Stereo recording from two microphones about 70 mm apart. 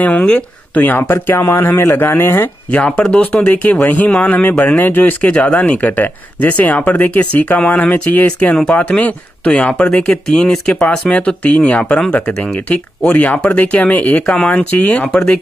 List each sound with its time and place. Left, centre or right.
0.0 s speech: centre
0.7 s speech: left
3.1 s speech: centre
5.3 s speech: centre
14.2 s speech: centre
14.5 s speech: left